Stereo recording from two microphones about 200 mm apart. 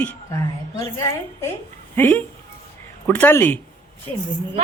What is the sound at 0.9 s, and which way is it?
Speech, 15° left (ahead or behind).